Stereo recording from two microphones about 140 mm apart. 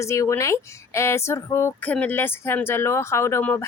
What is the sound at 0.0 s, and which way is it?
Speech, 20° left (ahead or behind).